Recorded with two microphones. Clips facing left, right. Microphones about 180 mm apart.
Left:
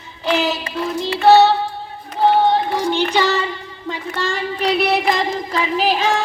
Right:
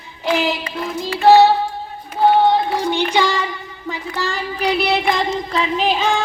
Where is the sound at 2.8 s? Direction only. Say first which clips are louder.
Even; 15° right (ahead or behind).